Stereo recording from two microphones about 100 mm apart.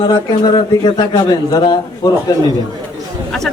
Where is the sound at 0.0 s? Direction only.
45° left (ahead or behind).